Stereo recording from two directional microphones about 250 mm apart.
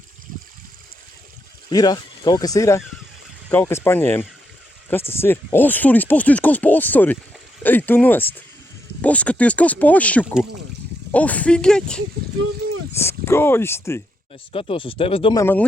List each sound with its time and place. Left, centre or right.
1.7 s speech: centre
14.5 s speech: left